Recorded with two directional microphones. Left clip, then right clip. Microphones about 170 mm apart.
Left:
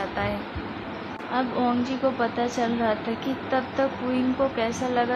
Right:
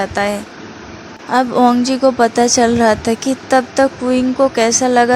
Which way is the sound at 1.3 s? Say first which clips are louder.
Right 13 dB; 60° right (ahead or behind).